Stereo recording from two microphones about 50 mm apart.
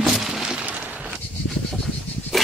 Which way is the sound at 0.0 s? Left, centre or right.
Centre.